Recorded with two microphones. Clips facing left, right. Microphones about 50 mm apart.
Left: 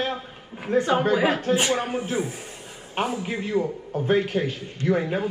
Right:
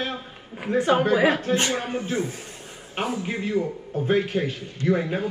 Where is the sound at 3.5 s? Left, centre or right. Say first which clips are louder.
Left 2 dB; left.